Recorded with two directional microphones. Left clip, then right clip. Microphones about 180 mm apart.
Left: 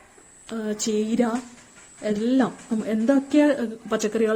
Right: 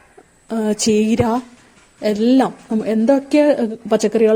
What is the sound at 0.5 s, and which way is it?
A woman's voice, 40° right (ahead or behind).